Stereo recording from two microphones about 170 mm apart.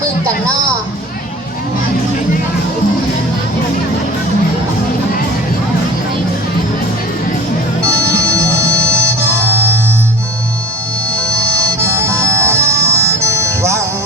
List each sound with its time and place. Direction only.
7.9 s music: 15° right (ahead or behind)
11.8 s music: 15° right (ahead or behind)